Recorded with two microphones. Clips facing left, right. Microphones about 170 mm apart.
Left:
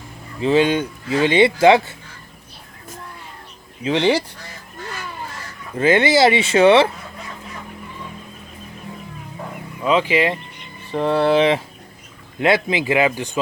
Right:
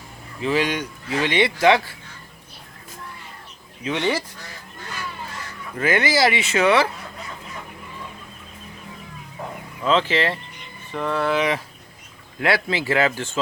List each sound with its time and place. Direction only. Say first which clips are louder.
0.3 s speech: left 6 dB; 30° left (ahead or behind)
3.8 s speech: left 6 dB; 30° left (ahead or behind)
5.7 s speech: left 6 dB; 25° left (ahead or behind)
9.8 s speech: left 3 dB; 10° left (ahead or behind)
10.9 s speech: left 6 dB; 30° left (ahead or behind); by 13.4 s 15° left (ahead or behind)